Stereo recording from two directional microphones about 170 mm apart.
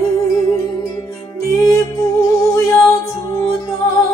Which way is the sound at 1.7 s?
15° left (ahead or behind).